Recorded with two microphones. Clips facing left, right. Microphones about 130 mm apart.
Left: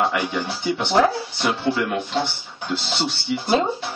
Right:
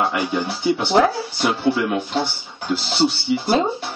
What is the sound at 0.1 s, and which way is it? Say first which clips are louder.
Speech: right 2 dB; 5° right (ahead or behind).